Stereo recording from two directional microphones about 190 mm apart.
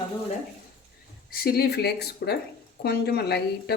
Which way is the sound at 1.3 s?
55° left (ahead or behind).